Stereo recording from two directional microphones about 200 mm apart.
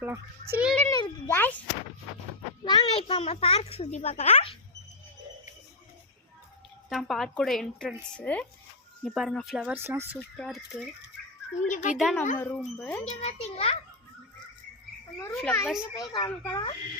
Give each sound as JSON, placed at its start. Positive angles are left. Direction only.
{"t": 0.0, "sound": "a child's voice", "side_deg": -10}
{"t": 0.8, "sound": "a child's voice", "side_deg": 15}
{"t": 2.6, "sound": "a child's voice", "side_deg": 25}
{"t": 6.9, "sound": "a woman's voice", "side_deg": 0}
{"t": 10.2, "sound": "a woman's voice", "side_deg": 5}
{"t": 11.7, "sound": "a child's voice", "side_deg": 40}
{"t": 11.9, "sound": "a woman's voice", "side_deg": 0}
{"t": 13.1, "sound": "a child's voice", "side_deg": 30}
{"t": 15.4, "sound": "a woman's voice", "side_deg": 5}
{"t": 16.0, "sound": "speech", "side_deg": 20}